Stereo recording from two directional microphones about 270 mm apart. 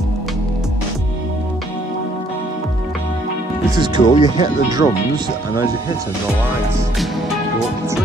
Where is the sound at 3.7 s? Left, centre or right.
Centre.